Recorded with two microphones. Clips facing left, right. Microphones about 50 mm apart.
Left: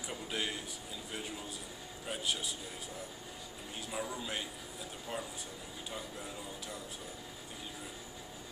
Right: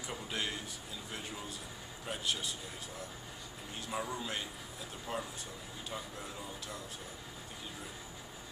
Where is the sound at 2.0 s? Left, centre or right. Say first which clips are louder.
Even; centre.